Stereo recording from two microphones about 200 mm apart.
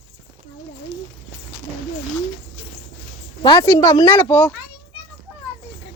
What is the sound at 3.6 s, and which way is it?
Speech, 15° left (ahead or behind).